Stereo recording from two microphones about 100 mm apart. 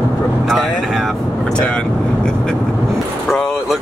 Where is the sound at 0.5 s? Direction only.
Centre (ahead or behind).